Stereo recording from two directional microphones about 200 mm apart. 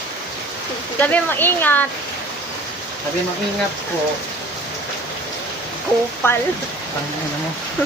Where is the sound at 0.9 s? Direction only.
10° left (ahead or behind).